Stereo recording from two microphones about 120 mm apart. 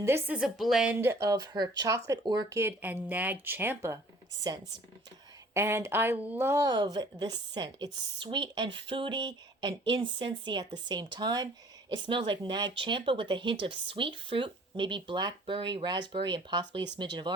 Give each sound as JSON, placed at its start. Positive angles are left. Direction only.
{"t": 0.0, "sound": "speech", "side_deg": -20}
{"t": 0.3, "sound": "speech", "side_deg": -5}
{"t": 0.9, "sound": "speech", "side_deg": -20}
{"t": 2.6, "sound": "speech", "side_deg": -15}
{"t": 5.5, "sound": "speech", "side_deg": -20}
{"t": 6.7, "sound": "speech", "side_deg": -35}